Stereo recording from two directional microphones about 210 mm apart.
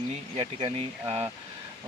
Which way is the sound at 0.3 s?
30° right (ahead or behind).